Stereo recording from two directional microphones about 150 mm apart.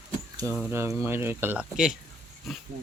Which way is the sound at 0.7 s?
15° right (ahead or behind).